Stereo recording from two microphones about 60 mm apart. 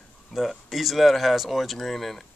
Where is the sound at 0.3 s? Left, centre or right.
Centre.